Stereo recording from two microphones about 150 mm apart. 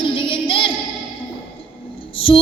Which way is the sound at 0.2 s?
35° left (ahead or behind).